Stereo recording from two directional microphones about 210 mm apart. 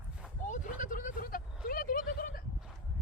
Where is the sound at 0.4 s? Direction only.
35° left (ahead or behind).